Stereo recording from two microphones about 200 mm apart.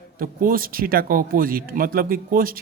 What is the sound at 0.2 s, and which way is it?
Speech, 45° right (ahead or behind).